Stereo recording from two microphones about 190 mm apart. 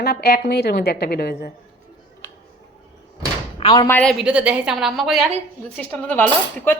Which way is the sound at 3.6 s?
20° left (ahead or behind).